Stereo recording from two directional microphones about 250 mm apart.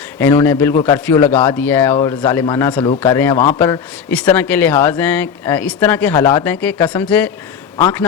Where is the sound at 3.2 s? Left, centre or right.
Centre.